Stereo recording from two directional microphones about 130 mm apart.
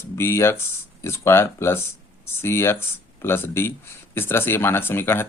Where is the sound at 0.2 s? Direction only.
20° left (ahead or behind).